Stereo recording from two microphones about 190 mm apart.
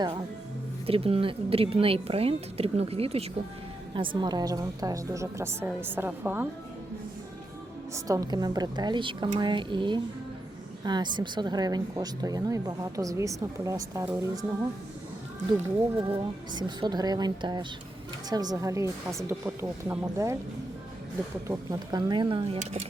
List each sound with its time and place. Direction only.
0.9 s a woman's voice: 30° right (ahead or behind); by 6.5 s 10° right (ahead or behind)
7.9 s speech: 15° right (ahead or behind)
16.0 s a woman's voice: 25° right (ahead or behind)
21.4 s speech: 15° right (ahead or behind); by 22.8 s 35° right (ahead or behind)